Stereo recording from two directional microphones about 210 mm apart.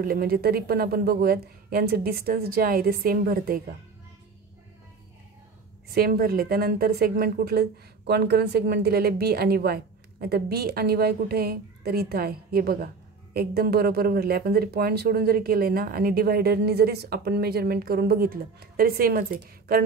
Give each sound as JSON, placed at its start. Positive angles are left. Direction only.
{"t": 0.0, "sound": "a woman's voice", "side_deg": -45}
{"t": 5.9, "sound": "a woman's voice", "side_deg": -45}